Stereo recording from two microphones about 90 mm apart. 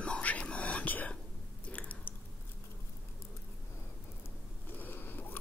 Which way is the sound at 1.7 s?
15° left (ahead or behind).